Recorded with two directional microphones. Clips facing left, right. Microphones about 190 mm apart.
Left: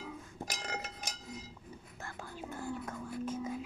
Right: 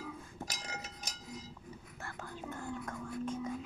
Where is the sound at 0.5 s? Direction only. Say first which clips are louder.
Left 4 dB; 60° left (ahead or behind).